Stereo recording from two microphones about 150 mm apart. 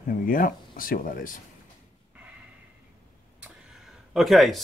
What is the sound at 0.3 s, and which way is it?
Speech, 70° left (ahead or behind).